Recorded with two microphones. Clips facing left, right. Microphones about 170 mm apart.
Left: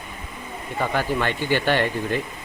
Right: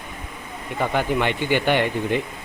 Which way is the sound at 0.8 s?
15° right (ahead or behind).